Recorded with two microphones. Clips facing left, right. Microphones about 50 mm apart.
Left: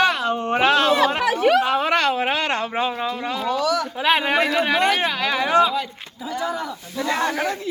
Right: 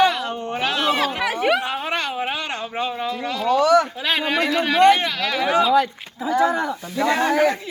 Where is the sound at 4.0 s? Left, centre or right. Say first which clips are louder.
Left 3 dB; left.